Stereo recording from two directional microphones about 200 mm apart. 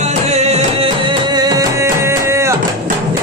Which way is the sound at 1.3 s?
20° right (ahead or behind).